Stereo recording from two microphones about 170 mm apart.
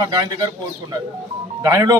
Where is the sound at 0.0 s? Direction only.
25° right (ahead or behind).